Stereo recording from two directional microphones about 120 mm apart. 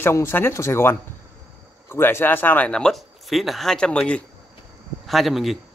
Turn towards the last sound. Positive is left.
turn(degrees=0)  # may be behind; listen again after turning